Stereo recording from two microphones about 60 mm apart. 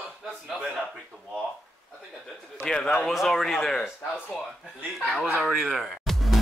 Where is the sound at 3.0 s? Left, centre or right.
Centre.